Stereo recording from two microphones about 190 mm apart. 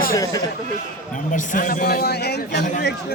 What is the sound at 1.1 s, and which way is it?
A man's voice, 45° left (ahead or behind).